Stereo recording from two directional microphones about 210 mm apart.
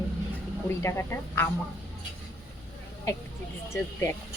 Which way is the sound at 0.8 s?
10° left (ahead or behind).